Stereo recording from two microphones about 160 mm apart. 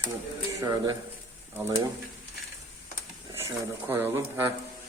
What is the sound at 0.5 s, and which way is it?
Speech, 25° right (ahead or behind).